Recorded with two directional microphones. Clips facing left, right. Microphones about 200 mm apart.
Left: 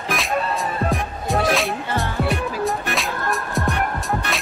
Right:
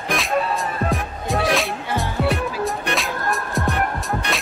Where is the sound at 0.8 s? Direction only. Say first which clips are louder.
Even; centre (ahead or behind).